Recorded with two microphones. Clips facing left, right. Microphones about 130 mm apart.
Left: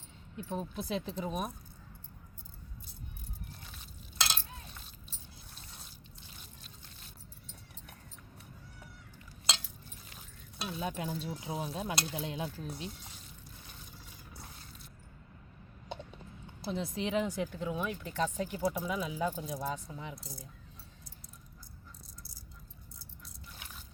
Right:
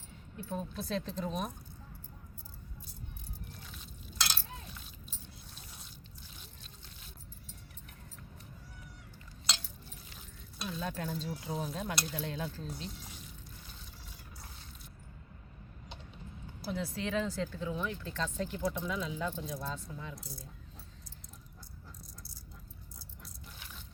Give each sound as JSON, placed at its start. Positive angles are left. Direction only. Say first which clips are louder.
{"t": 0.3, "sound": "speech", "louder": "left 1 dB", "side_deg": 15}
{"t": 10.7, "sound": "speech", "louder": "left 1 dB", "side_deg": 15}
{"t": 16.6, "sound": "speech", "louder": "left 1 dB", "side_deg": 25}